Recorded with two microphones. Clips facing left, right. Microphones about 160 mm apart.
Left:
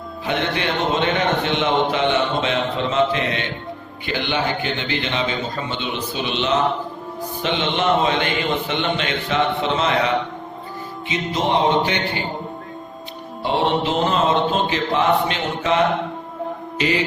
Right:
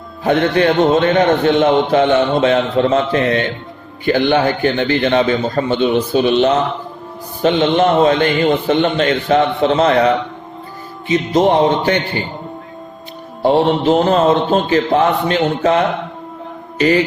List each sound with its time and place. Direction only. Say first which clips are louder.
0.3 s a man's voice: right 10 dB; 45° right (ahead or behind)
11.1 s a man's voice: right 8 dB; 45° right (ahead or behind)
13.4 s a man's voice: right 7 dB; 45° right (ahead or behind)
16.7 s mantra: right 8 dB; 45° right (ahead or behind)